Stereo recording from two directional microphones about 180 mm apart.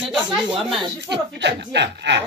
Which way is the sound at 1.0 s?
75° right (ahead or behind).